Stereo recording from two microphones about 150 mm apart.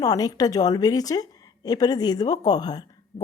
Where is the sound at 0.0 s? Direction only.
25° left (ahead or behind).